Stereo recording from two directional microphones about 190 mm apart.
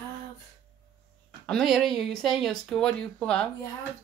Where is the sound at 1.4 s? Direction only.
Centre (ahead or behind).